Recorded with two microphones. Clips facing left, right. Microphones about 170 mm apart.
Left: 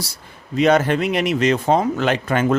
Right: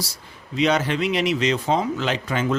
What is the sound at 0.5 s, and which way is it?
Speech, 50° left (ahead or behind).